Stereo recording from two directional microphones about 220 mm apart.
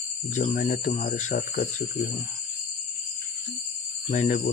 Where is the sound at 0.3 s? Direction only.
35° left (ahead or behind).